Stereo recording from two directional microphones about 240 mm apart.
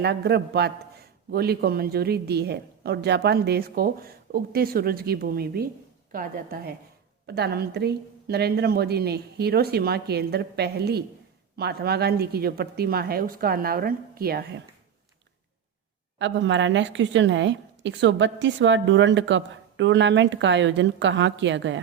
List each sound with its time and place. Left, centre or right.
0.0 s a man's voice: right
16.1 s a woman's voice: right